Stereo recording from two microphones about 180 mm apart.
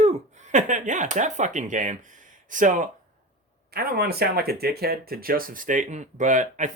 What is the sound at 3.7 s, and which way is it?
Speech, 60° right (ahead or behind).